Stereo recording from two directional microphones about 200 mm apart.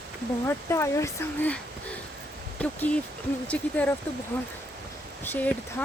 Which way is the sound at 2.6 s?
5° left (ahead or behind).